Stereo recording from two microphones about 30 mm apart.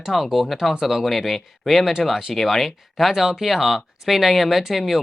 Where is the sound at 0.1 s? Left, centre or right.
Centre.